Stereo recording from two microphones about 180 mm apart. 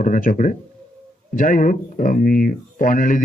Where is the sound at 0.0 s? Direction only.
50° left (ahead or behind).